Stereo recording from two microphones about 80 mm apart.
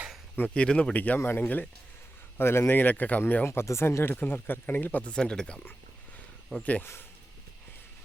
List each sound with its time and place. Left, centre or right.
0.3 s speech: centre